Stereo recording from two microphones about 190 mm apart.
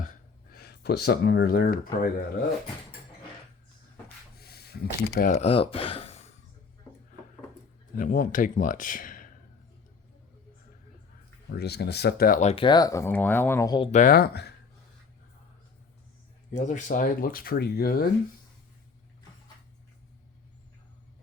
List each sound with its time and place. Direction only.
0.5 s speech: 55° left (ahead or behind)
4.4 s a sound: 55° left (ahead or behind)
5.3 s speech: 30° left (ahead or behind)
7.9 s speech: 45° left (ahead or behind)
11.4 s speech: 60° left (ahead or behind); by 13.9 s 20° left (ahead or behind)
13.9 s speech: 45° left (ahead or behind)
16.5 s speech: 40° left (ahead or behind)